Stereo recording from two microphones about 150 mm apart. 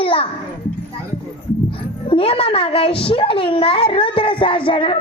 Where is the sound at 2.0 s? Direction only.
40° left (ahead or behind).